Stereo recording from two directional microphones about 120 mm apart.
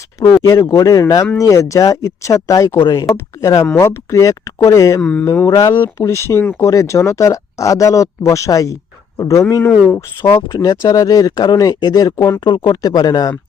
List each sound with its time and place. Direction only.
0.4 s a man's voice: 25° left (ahead or behind)
10.6 s speech: 30° left (ahead or behind)
12.5 s speech: 35° left (ahead or behind)